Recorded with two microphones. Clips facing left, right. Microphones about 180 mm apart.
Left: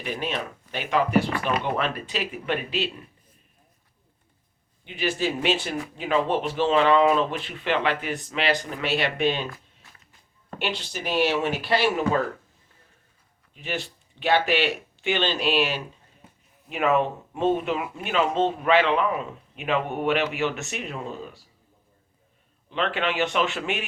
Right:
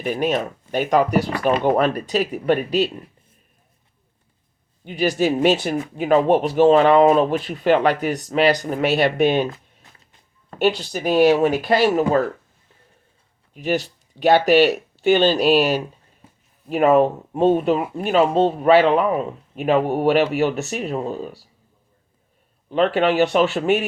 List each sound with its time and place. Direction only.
0.0 s speech: 45° right (ahead or behind)
4.9 s speech: 40° right (ahead or behind)
10.6 s speech: 40° right (ahead or behind)
13.5 s speech: 40° right (ahead or behind)
22.7 s speech: 40° right (ahead or behind)